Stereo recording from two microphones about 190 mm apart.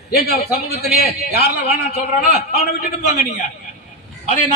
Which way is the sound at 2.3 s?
35° left (ahead or behind).